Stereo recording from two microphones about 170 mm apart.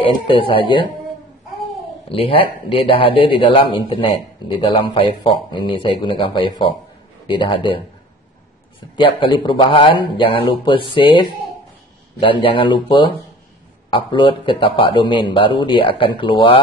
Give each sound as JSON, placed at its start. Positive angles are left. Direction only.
{"t": 0.0, "sound": "speech", "side_deg": 30}
{"t": 2.0, "sound": "speech", "side_deg": 35}
{"t": 8.9, "sound": "speech", "side_deg": 30}